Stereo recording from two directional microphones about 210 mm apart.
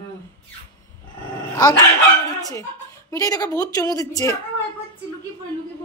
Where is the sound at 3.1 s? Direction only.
15° left (ahead or behind).